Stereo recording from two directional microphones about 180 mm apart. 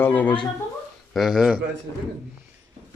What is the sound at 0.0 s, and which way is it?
Speech, 10° left (ahead or behind).